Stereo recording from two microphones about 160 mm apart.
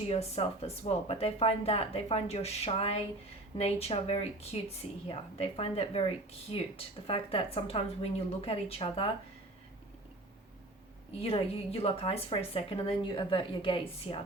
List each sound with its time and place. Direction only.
0.1 s speech: 40° left (ahead or behind)
11.2 s speech: 35° left (ahead or behind)